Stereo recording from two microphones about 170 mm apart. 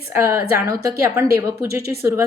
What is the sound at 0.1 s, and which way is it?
A woman's voice, 15° right (ahead or behind).